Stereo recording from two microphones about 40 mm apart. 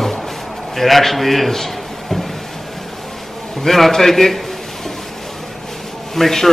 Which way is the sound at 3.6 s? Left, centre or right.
Centre.